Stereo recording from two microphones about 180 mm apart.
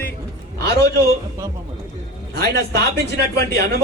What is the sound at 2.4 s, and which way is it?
Speech, 65° right (ahead or behind).